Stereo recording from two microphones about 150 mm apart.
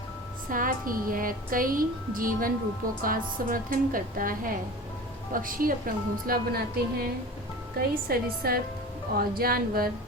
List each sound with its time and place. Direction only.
0.5 s a woman's voice: 70° right (ahead or behind)